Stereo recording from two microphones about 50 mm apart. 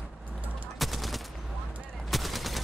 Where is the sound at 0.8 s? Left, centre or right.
Centre.